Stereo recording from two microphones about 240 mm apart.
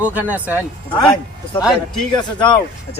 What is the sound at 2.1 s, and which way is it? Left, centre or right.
Speech, centre.